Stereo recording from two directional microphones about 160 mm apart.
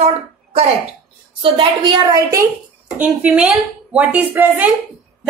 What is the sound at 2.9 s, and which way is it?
A woman's voice, 10° right (ahead or behind).